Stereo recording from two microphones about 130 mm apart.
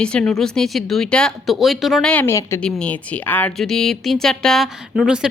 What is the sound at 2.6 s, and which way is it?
Speech, 10° left (ahead or behind).